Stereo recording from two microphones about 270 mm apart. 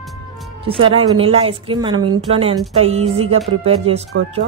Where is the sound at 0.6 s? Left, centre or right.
Centre.